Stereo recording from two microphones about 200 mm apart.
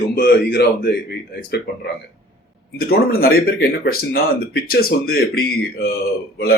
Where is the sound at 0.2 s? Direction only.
55° left (ahead or behind).